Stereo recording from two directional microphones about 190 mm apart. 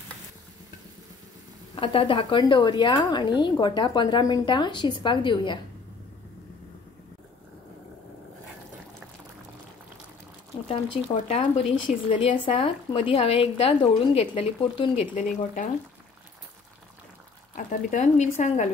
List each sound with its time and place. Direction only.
1.8 s a woman's voice: 30° left (ahead or behind)
10.7 s a woman's voice: 30° left (ahead or behind)
17.6 s a woman's voice: 40° left (ahead or behind)